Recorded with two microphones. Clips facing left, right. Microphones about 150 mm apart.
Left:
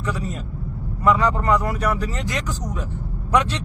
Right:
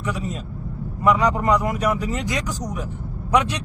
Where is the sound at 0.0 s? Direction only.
20° right (ahead or behind).